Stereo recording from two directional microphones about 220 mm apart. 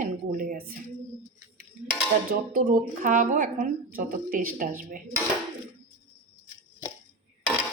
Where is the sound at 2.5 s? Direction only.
40° right (ahead or behind).